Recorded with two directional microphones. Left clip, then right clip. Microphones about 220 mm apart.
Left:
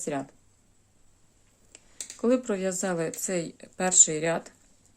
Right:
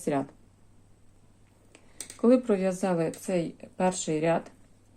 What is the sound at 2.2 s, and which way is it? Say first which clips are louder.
Speech: right 3 dB; 10° left (ahead or behind).